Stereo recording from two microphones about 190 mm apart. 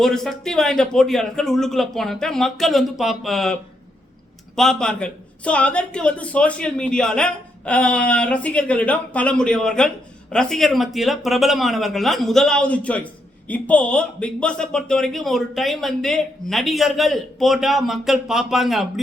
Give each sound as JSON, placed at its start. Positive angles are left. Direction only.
{"t": 0.0, "sound": "speech", "side_deg": 0}